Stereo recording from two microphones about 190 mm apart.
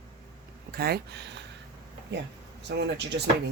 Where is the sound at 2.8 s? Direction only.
65° right (ahead or behind).